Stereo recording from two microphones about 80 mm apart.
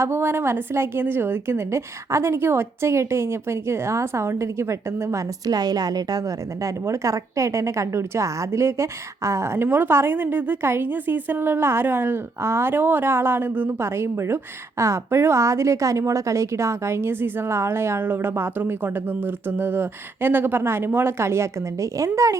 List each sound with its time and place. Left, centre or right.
0.0 s a woman's voice: right
5.5 s a woman's voice: right